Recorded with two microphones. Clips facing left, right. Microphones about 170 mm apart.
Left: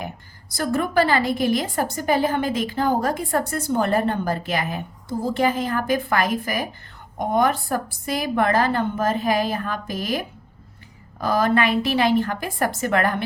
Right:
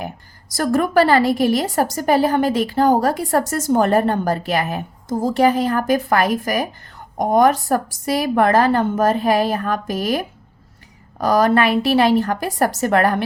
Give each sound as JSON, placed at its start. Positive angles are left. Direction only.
{"t": 0.5, "sound": "a woman's voice", "side_deg": -45}